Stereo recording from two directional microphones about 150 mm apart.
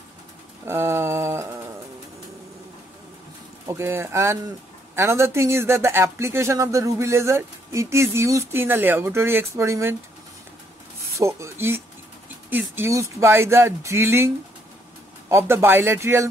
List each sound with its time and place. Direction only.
0.7 s a sound: 15° right (ahead or behind)
3.6 s speech: 15° right (ahead or behind)
11.1 s speech: 20° right (ahead or behind)